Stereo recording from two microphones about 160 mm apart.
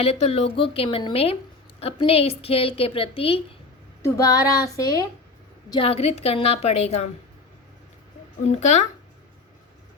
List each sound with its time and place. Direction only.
0.0 s a woman's voice: 40° left (ahead or behind)
4.0 s speech: 20° left (ahead or behind)
5.7 s a woman's voice: 35° left (ahead or behind)
8.4 s speech: 45° left (ahead or behind)